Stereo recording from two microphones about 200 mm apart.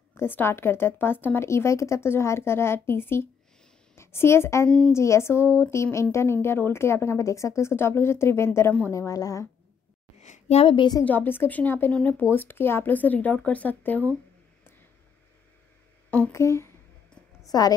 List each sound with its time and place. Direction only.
0.2 s a woman's voice: 10° left (ahead or behind)
10.2 s a woman's voice: 35° left (ahead or behind)
11.1 s a woman's voice: 10° left (ahead or behind)
16.1 s a sound: 10° left (ahead or behind)
17.5 s a woman's voice: 20° left (ahead or behind)